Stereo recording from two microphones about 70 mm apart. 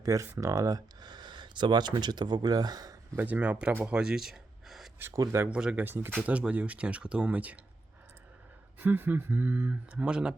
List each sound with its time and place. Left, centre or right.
0.0 s speech: right
0.9 s speech: right
3.2 s speech: right
4.0 s gasp: centre
5.5 s speech: centre
5.7 s speech: right
6.2 s speech: centre
8.8 s speech: right